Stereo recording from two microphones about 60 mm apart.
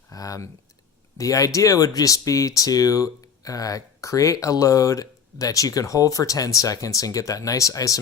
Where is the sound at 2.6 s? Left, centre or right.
Left.